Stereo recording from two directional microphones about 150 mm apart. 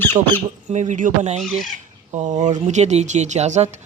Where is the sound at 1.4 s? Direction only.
Centre (ahead or behind).